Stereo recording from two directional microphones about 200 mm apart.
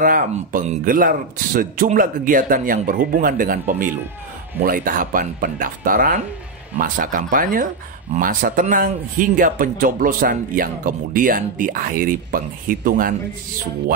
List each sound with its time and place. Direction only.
0.0 s a man's voice: 45° right (ahead or behind)